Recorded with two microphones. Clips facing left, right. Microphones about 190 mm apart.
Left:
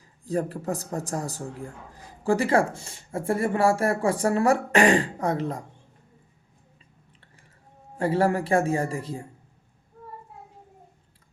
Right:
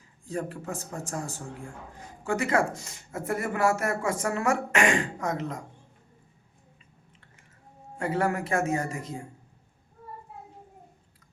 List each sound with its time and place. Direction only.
0.3 s a man's voice: 35° left (ahead or behind)
7.9 s a man's voice: 30° left (ahead or behind)